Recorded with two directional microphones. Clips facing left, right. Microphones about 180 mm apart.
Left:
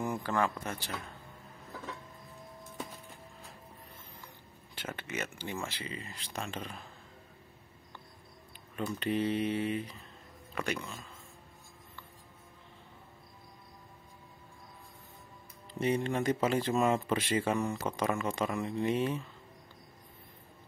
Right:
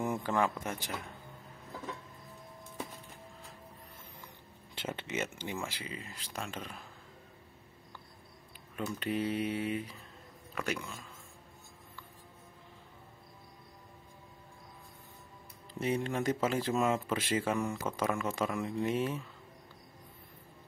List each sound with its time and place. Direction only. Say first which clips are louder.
0.0 s a sound: right 1 dB; 25° right (ahead or behind)
0.3 s speech: even; 15° right (ahead or behind)
4.7 s speech: right 2 dB; 25° right (ahead or behind); by 6.8 s 5° right (ahead or behind)
8.7 s speech: left 2 dB; 5° right (ahead or behind)
15.8 s speech: left 2 dB; 5° right (ahead or behind)
17.6 s speech: left 1 dB; 10° left (ahead or behind)
18.1 s speech: left 1 dB; 5° right (ahead or behind)